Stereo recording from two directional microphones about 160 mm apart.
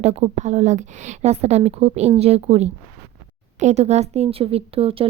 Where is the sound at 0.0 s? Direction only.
45° right (ahead or behind).